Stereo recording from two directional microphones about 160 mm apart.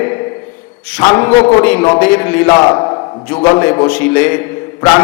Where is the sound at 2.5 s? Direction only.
25° left (ahead or behind).